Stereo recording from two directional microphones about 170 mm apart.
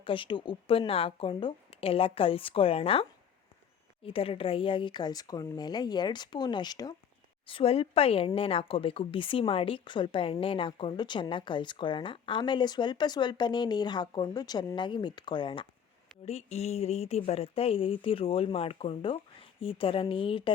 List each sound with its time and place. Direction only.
0.0 s speech: 30° left (ahead or behind)
16.2 s speech: 40° left (ahead or behind)